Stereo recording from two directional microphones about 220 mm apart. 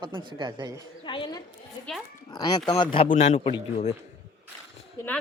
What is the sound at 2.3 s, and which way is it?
A man's voice, 20° left (ahead or behind).